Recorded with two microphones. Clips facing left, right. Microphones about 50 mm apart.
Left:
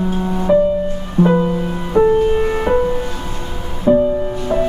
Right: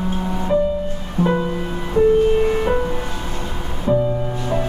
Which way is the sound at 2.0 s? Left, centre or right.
Left.